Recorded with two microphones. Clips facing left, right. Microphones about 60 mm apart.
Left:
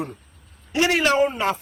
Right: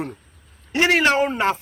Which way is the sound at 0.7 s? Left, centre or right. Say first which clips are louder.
Right 1 dB; right.